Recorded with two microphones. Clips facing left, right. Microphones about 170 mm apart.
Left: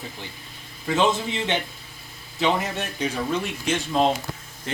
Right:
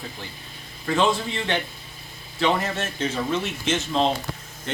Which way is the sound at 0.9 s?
20° left (ahead or behind).